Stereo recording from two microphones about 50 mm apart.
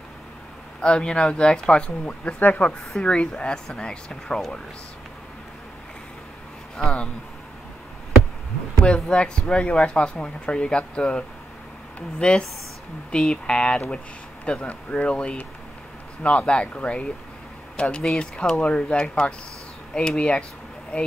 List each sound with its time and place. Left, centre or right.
0.7 s speech: centre
2.3 s speech: left
3.0 s speech: left
6.8 s speech: centre
8.7 s speech: left